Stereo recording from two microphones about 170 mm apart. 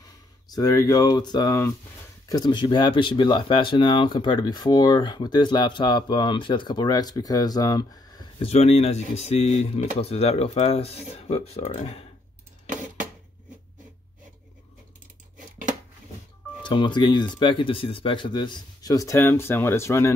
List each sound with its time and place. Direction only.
0.5 s speech: 20° left (ahead or behind)
8.5 s speech: 40° left (ahead or behind)
12.6 s a sound: 50° right (ahead or behind)
16.6 s speech: 30° left (ahead or behind)